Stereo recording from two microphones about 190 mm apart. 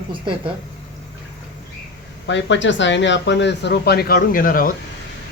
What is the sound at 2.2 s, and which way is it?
Speech, 70° left (ahead or behind).